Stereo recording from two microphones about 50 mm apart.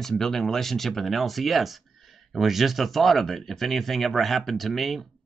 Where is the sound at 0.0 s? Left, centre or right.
Centre.